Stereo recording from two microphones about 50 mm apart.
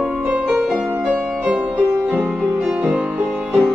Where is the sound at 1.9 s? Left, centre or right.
Right.